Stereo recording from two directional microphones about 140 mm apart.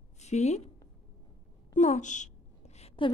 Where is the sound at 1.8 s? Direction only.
60° left (ahead or behind).